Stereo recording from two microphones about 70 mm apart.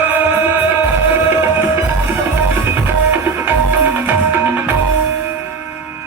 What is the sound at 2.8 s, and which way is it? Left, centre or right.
Music, right.